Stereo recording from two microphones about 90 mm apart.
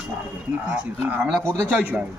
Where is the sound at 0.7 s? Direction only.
10° right (ahead or behind).